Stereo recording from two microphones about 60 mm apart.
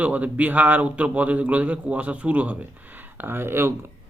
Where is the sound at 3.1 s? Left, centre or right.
Right.